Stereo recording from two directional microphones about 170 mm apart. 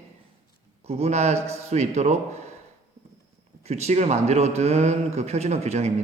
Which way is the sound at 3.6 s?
40° right (ahead or behind).